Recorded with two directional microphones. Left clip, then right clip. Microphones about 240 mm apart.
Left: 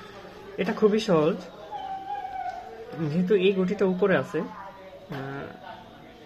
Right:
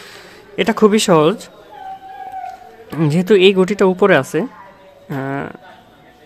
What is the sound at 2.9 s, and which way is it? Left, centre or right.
Speech, right.